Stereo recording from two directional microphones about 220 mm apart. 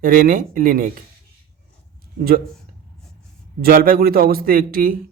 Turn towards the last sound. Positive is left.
turn(degrees=-40)  # may be behind; listen again after turning